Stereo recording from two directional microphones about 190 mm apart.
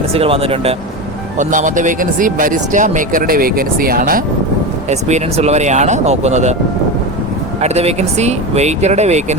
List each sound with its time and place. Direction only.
0.1 s speech: 30° right (ahead or behind)
1.4 s speech: 40° right (ahead or behind)
4.9 s speech: 35° right (ahead or behind)
7.6 s speech: 35° right (ahead or behind)